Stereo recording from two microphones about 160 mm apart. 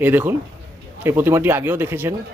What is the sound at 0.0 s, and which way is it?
Speech, 10° right (ahead or behind).